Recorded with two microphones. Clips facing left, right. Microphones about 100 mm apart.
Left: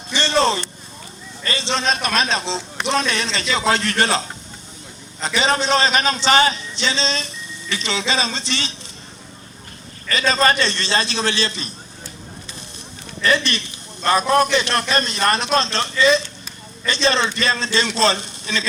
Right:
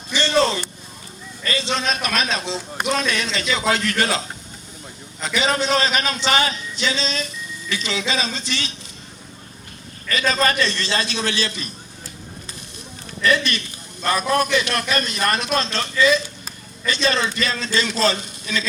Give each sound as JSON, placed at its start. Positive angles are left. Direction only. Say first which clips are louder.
{"t": 0.1, "sound": "a sound", "louder": "left 1 dB", "side_deg": 30}
{"t": 1.5, "sound": "a man's voice", "louder": "left 1 dB", "side_deg": 30}
{"t": 5.2, "sound": "a man's voice", "louder": "left 2 dB", "side_deg": 30}
{"t": 10.1, "sound": "a man's voice", "louder": "left 2 dB", "side_deg": 30}
{"t": 13.2, "sound": "a man's voice", "louder": "even", "side_deg": 30}